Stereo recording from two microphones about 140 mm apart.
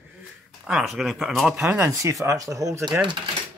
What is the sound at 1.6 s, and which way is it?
Speech, 20° right (ahead or behind).